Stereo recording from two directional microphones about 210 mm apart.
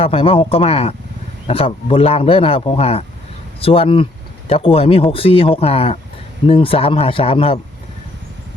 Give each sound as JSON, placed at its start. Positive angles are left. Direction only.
{"t": 0.0, "sound": "speech", "side_deg": 25}